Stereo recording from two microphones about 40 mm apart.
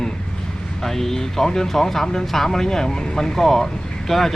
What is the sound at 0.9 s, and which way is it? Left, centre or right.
Speech, centre.